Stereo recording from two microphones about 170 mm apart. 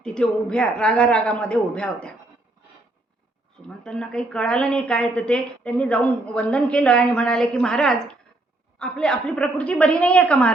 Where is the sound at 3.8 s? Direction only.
5° left (ahead or behind).